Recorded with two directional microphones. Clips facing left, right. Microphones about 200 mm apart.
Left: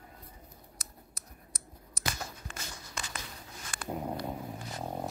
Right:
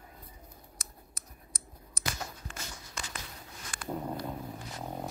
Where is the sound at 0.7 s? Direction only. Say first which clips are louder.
Even; 50° right (ahead or behind).